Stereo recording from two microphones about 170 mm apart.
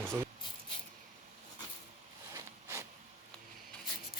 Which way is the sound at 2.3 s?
15° right (ahead or behind).